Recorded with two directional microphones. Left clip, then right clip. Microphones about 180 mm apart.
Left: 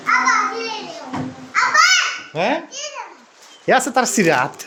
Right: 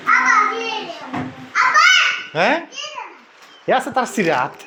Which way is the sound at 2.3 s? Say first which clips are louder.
Right 2 dB; 5° right (ahead or behind).